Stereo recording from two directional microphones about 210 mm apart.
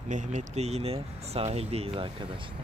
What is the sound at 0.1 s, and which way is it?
Speech, 35° right (ahead or behind).